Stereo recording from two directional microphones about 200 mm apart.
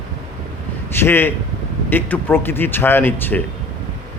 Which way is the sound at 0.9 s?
10° left (ahead or behind).